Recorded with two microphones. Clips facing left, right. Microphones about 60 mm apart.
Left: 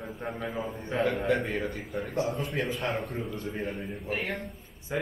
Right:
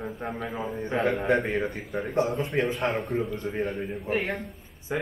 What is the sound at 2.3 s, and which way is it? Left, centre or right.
Speech, centre.